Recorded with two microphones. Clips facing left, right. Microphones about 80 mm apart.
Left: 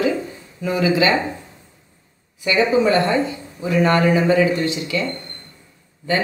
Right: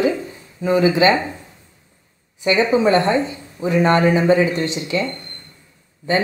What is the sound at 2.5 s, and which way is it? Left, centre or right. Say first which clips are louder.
A woman's voice: right 1 dB; right.